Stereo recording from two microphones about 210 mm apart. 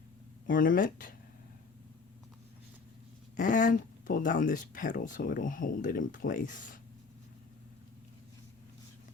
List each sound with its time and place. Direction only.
0.4 s speech: 40° left (ahead or behind)
3.3 s speech: 40° left (ahead or behind)